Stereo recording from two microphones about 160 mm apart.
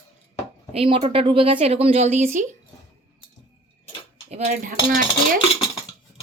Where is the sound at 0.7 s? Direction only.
40° right (ahead or behind).